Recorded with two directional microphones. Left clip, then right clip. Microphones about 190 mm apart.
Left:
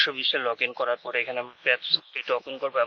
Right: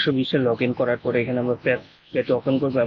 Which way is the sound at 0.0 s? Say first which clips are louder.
Right 3 dB; 45° left (ahead or behind).